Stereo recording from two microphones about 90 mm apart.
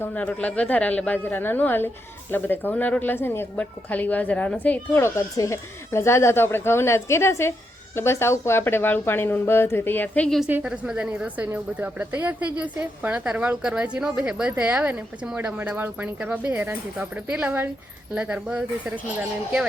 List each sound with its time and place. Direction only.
0.0 s a woman's voice: 15° left (ahead or behind)
4.9 s speech: 30° left (ahead or behind)
10.5 s speech: 10° right (ahead or behind)